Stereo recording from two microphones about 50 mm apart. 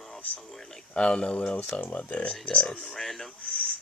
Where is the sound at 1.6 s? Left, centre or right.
Left.